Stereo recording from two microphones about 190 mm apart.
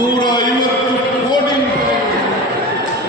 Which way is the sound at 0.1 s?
25° left (ahead or behind).